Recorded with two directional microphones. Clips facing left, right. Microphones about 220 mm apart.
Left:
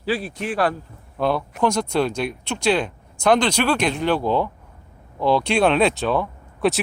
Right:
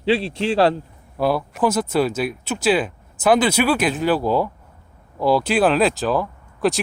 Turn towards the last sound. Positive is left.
turn(degrees=0)  # may be behind; listen again after turning